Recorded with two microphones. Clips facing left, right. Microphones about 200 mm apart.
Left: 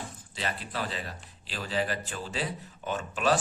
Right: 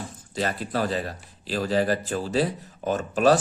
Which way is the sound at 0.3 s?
40° right (ahead or behind).